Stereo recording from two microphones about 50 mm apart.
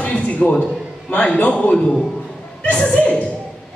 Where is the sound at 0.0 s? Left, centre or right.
Left.